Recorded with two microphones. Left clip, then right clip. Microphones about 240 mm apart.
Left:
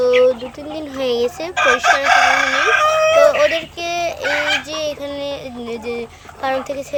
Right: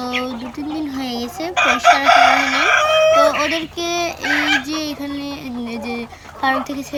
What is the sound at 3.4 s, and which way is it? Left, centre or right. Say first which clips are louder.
A child's voice: left 3 dB; centre.